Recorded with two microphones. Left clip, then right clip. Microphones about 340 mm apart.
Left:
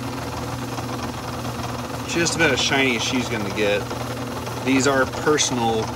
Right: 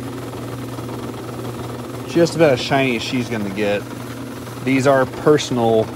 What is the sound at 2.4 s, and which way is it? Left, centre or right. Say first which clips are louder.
Speech: right 3 dB; centre.